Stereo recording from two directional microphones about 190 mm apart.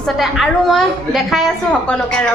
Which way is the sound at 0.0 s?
Centre (ahead or behind).